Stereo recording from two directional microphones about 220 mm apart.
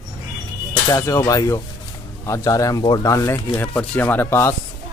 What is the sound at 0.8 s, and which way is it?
Speech, 15° left (ahead or behind).